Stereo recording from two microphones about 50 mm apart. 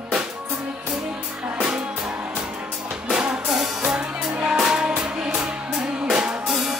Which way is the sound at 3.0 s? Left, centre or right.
Right.